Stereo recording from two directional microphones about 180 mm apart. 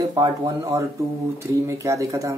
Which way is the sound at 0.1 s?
20° right (ahead or behind).